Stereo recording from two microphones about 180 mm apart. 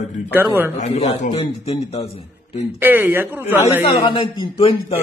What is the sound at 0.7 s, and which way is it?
A man's voice, 40° left (ahead or behind).